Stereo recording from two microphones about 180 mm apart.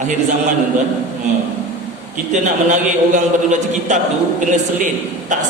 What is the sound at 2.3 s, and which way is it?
A man's voice, 45° right (ahead or behind).